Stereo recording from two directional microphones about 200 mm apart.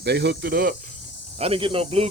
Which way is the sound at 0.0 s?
55° right (ahead or behind).